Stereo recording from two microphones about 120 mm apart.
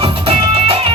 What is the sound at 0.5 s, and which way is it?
Music, 55° right (ahead or behind).